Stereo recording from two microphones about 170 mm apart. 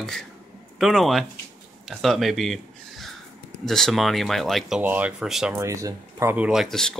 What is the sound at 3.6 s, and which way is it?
Speech, centre (ahead or behind).